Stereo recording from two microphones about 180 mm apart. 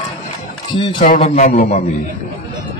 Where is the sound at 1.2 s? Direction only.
40° left (ahead or behind).